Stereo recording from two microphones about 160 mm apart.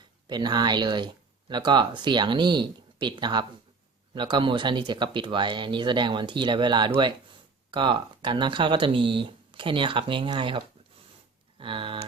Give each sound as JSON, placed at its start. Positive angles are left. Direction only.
{"t": 0.3, "sound": "speech", "side_deg": -25}
{"t": 11.6, "sound": "speech", "side_deg": -35}